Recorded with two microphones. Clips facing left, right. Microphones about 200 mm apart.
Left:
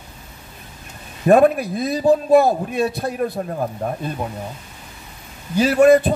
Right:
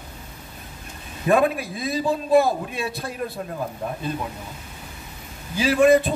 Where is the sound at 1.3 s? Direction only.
50° left (ahead or behind).